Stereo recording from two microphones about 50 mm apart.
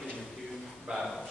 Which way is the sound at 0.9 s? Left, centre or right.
Centre.